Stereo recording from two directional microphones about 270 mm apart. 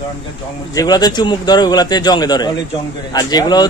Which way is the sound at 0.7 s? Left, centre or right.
Centre.